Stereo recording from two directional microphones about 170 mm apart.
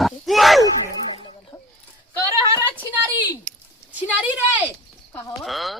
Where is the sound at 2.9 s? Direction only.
10° right (ahead or behind).